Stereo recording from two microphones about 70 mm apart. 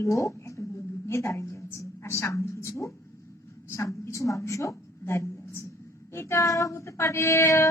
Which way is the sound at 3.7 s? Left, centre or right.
Left.